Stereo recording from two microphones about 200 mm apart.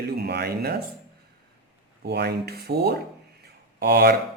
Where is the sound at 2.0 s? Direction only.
55° right (ahead or behind).